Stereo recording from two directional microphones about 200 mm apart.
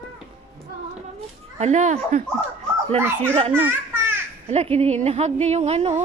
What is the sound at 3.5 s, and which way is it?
Children playing, 10° right (ahead or behind).